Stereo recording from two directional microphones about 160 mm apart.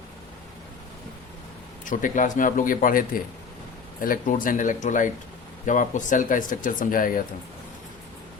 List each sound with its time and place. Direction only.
1.8 s speech: 55° left (ahead or behind)